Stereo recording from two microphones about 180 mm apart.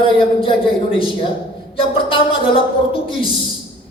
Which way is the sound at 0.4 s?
30° left (ahead or behind).